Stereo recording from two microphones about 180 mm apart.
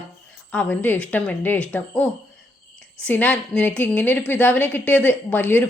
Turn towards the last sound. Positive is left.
turn(degrees=10)  # may be behind; listen again after turning